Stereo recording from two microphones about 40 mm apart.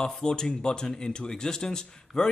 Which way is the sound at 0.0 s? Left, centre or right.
Centre.